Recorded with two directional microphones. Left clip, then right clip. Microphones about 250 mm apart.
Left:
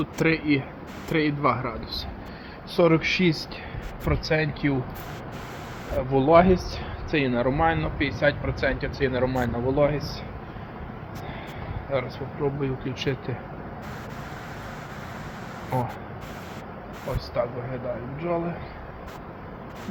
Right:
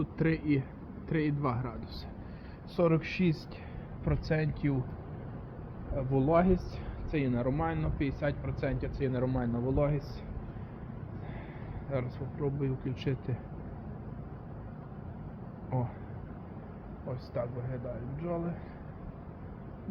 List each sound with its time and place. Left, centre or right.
0.0 s speech: centre
2.7 s speech: left
6.1 s speech: left
11.9 s speech: centre
17.4 s speech: centre